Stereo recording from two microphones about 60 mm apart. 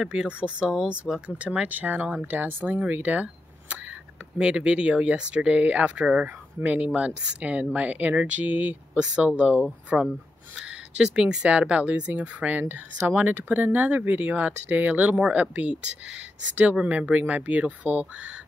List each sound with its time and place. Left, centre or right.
0.0 s speech: centre
11.0 s speech: centre
16.8 s speech: right